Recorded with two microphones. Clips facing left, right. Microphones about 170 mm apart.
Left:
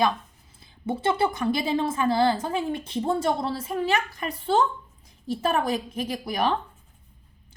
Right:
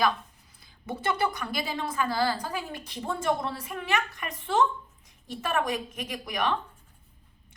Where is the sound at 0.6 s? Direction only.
25° left (ahead or behind).